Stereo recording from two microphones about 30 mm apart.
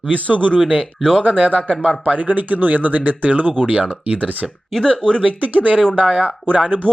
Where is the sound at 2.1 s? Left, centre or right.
Right.